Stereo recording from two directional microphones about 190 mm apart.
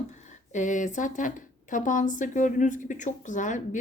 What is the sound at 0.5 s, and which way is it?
Speech, 40° left (ahead or behind).